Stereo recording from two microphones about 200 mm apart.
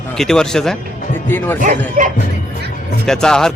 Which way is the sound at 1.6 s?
40° right (ahead or behind).